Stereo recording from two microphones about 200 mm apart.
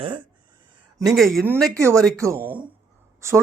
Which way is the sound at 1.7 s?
15° right (ahead or behind).